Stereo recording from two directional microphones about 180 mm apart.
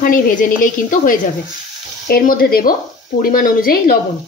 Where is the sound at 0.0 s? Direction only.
50° left (ahead or behind).